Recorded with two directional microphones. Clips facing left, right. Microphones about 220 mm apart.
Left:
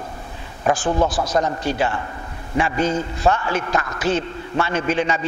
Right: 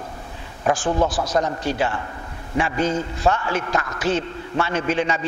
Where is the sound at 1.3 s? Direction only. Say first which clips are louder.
Left 1 dB; 15° left (ahead or behind).